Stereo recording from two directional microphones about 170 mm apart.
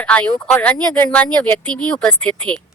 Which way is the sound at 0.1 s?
10° left (ahead or behind).